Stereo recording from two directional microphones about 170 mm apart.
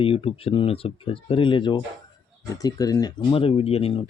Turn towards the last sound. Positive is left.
turn(degrees=35)  # may be behind; listen again after turning